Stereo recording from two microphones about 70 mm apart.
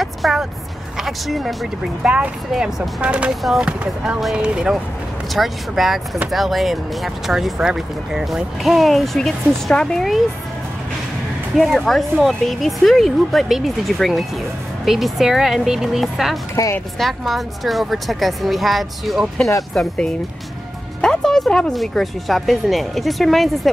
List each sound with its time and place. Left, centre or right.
0.0 s a sound: centre
0.9 s speech: centre
2.0 s speech: centre
2.5 s speech: centre
3.0 s speech: centre
5.3 s speech: centre
11.5 s speech: centre
16.6 s speech: left
17.0 s speech: centre
21.0 s music: centre
21.7 s speech: centre